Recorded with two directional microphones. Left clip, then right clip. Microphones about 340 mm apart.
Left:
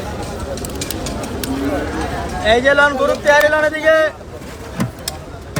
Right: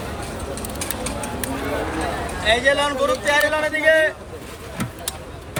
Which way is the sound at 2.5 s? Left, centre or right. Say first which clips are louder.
Left 6 dB; left.